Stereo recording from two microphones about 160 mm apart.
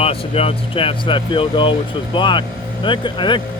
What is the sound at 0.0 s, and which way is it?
Speech, 40° left (ahead or behind).